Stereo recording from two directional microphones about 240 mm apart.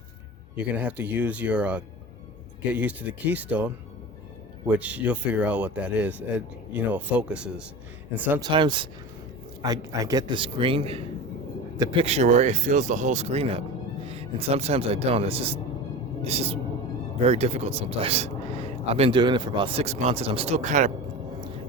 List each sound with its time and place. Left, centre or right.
0.5 s speech: centre
4.7 s speech: centre
8.4 s a man's voice: centre